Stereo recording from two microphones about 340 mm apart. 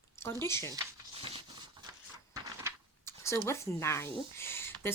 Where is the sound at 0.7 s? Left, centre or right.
Centre.